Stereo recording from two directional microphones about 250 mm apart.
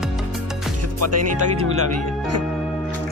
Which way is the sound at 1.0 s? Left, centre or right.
Right.